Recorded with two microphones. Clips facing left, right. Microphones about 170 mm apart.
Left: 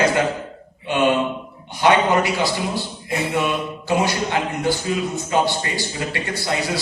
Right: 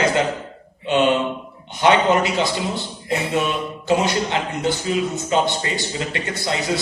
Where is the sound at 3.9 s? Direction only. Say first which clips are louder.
Right 1 dB; 20° right (ahead or behind).